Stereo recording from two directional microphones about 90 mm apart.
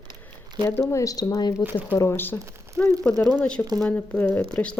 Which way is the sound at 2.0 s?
25° left (ahead or behind).